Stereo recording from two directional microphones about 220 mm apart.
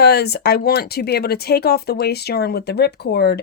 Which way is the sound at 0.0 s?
45° left (ahead or behind).